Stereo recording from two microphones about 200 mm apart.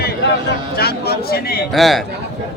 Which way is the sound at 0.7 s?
50° left (ahead or behind).